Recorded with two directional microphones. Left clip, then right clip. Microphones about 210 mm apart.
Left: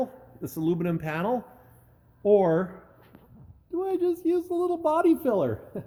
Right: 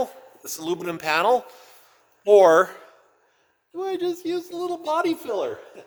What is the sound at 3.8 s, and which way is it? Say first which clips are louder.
Speech: even; 5° right (ahead or behind).